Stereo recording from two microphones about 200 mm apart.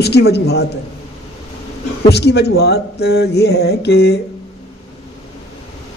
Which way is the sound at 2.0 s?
55° left (ahead or behind).